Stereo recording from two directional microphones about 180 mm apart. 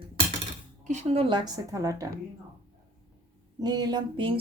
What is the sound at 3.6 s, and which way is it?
Speech, 25° right (ahead or behind).